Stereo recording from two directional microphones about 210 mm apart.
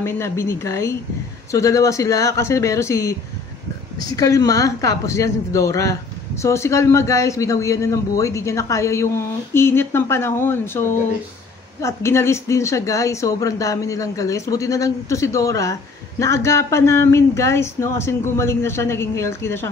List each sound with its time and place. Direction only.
0.0 s speech: 10° left (ahead or behind)